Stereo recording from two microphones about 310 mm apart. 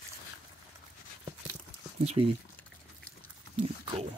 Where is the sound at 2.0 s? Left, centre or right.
Centre.